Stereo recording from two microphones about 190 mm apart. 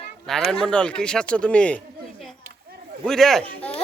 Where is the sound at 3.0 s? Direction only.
Centre (ahead or behind).